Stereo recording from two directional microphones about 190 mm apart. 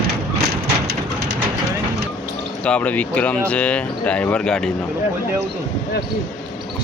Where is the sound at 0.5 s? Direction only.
60° right (ahead or behind).